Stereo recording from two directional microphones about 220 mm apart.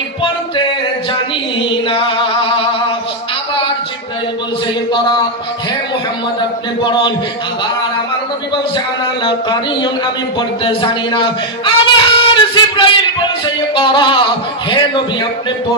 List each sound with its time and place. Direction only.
1.7 s music: 25° left (ahead or behind)
4.9 s speech: 20° left (ahead or behind)
6.8 s speech: 20° left (ahead or behind)
8.7 s speech: 20° left (ahead or behind)